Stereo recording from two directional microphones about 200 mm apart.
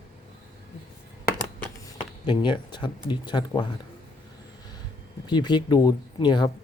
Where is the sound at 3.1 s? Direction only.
20° left (ahead or behind).